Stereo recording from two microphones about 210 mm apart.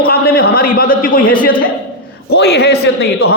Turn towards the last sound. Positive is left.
turn(degrees=50)  # may be behind; listen again after turning